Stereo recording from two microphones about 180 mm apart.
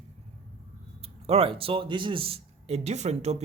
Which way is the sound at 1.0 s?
35° right (ahead or behind).